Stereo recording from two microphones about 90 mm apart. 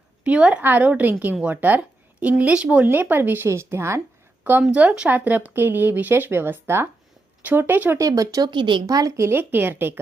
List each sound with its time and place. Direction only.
0.3 s a woman's voice: 10° right (ahead or behind); by 4.0 s 30° right (ahead or behind)
4.7 s speech: 15° right (ahead or behind)
7.9 s speech: 40° right (ahead or behind)
8.4 s speech: 60° right (ahead or behind)
8.9 s speech: 40° right (ahead or behind); by 10.0 s 25° right (ahead or behind)